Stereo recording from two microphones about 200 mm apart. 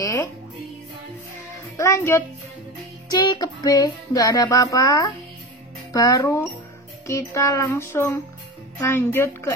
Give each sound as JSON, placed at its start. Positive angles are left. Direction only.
{"t": 0.0, "sound": "music", "side_deg": 15}
{"t": 1.8, "sound": "speech", "side_deg": 15}
{"t": 3.1, "sound": "music", "side_deg": 20}
{"t": 5.9, "sound": "speech", "side_deg": 20}